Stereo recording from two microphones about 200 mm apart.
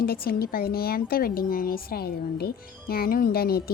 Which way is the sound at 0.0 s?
50° left (ahead or behind).